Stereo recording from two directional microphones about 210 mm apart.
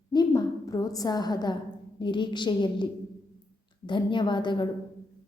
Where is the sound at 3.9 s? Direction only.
20° left (ahead or behind).